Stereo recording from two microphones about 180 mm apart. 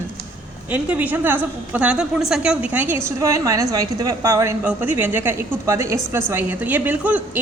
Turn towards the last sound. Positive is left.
turn(degrees=-10)  # may be behind; listen again after turning